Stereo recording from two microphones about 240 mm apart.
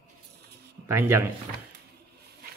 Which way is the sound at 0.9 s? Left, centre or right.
Centre.